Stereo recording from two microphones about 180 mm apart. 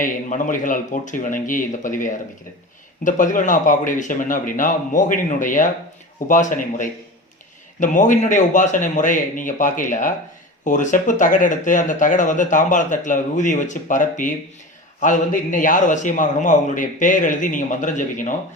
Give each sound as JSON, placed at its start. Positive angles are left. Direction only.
{"t": 0.0, "sound": "speech", "side_deg": 45}